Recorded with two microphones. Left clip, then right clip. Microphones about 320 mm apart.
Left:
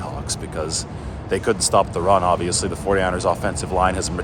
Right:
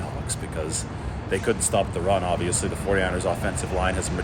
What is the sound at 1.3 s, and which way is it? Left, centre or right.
Speech, centre.